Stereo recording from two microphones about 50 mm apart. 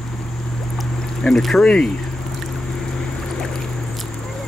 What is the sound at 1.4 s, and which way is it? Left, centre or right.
Speech, centre.